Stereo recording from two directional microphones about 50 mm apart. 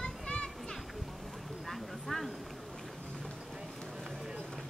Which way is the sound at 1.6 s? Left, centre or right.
Centre.